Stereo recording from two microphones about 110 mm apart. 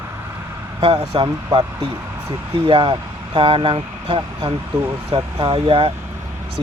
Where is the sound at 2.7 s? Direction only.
50° right (ahead or behind).